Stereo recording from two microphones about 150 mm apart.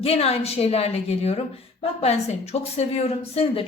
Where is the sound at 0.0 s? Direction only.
40° left (ahead or behind).